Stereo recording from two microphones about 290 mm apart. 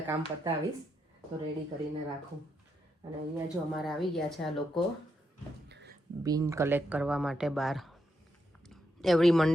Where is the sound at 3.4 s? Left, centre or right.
Centre.